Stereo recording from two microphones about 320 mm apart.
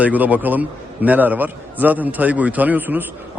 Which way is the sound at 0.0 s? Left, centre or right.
Centre.